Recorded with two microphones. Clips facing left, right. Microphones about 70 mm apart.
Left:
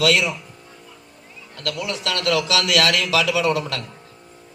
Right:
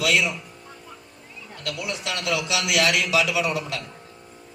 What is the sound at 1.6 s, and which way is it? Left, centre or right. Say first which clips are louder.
A man's voice: left 4 dB; left.